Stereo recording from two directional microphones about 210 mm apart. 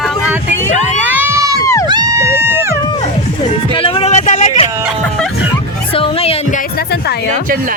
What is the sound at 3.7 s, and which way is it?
Speech, 25° left (ahead or behind).